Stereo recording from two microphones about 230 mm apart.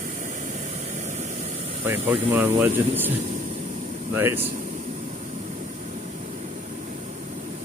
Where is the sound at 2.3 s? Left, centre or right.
Centre.